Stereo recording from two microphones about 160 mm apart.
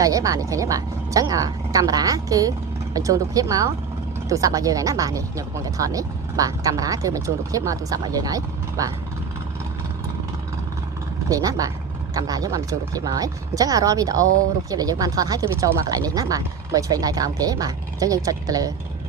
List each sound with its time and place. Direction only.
0.0 s speech: 20° right (ahead or behind)
11.3 s speech: 20° right (ahead or behind)